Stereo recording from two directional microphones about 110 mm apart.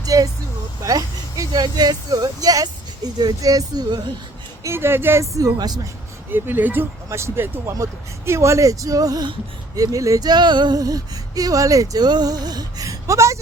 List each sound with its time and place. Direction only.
0.0 s vehicle: 35° right (ahead or behind)
0.8 s speech: 35° right (ahead or behind)
4.6 s speech: 20° right (ahead or behind); by 5.9 s 40° right (ahead or behind)
6.3 s speech: 15° right (ahead or behind); by 9.3 s 35° right (ahead or behind)
9.7 s a sound: 30° right (ahead or behind)